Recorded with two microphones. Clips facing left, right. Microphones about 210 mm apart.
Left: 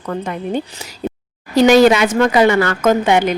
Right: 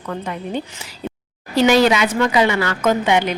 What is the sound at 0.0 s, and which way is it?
A woman's voice, 45° left (ahead or behind).